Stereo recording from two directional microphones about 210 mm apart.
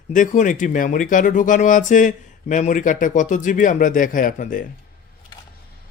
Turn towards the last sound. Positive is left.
turn(degrees=40)  # may be behind; listen again after turning